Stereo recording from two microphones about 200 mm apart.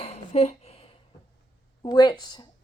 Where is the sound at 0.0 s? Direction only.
35° left (ahead or behind).